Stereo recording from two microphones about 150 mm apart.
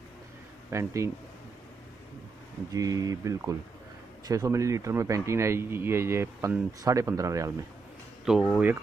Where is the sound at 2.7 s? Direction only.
25° right (ahead or behind).